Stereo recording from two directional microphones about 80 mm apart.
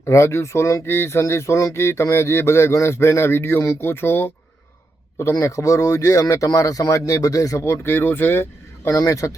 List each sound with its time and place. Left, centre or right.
0.0 s speech: left
5.1 s speech: left
8.9 s speech: left